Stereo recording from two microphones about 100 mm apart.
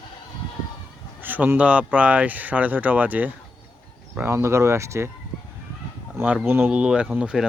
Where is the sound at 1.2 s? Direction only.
20° right (ahead or behind).